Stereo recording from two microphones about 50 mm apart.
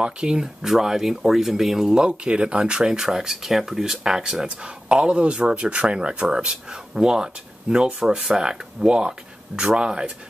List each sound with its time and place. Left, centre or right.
0.0 s speech: centre